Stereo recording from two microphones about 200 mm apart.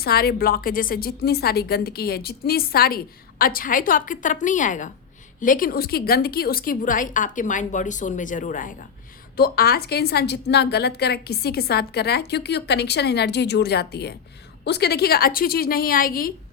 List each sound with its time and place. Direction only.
0.0 s a woman's voice: 50° left (ahead or behind)